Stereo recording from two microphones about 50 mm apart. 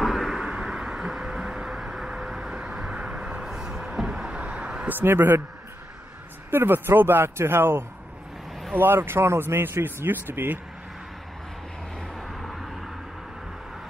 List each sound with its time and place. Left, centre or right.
0.0 s a sound: centre
2.5 s vehicle: centre
4.4 s a sound: right
4.8 s speech: right
6.5 s speech: right
12.2 s vehicle: centre